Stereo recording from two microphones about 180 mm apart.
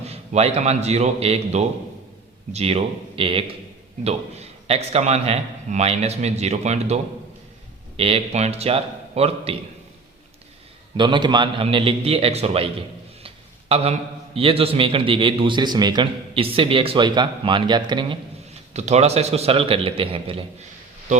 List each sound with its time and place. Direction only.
0.0 s a man's voice: 35° right (ahead or behind)
10.9 s a man's voice: 25° right (ahead or behind)
13.2 s a sound: 35° right (ahead or behind)
14.3 s a man's voice: 30° right (ahead or behind)
18.7 s a man's voice: 40° right (ahead or behind)